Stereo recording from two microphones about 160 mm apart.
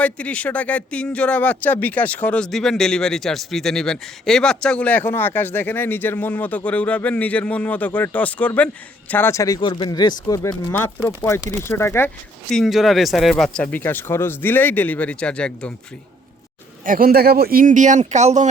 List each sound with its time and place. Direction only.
0.0 s speech: 10° left (ahead or behind)
9.6 s speech: 30° left (ahead or behind)
12.5 s speech: centre (ahead or behind)
16.8 s speech: 60° right (ahead or behind)